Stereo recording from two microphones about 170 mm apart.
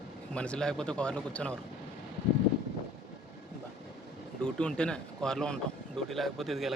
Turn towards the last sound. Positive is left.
turn(degrees=0)  # may be behind; listen again after turning